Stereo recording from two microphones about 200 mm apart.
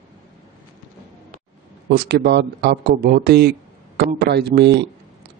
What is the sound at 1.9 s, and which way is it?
Speech, 55° right (ahead or behind).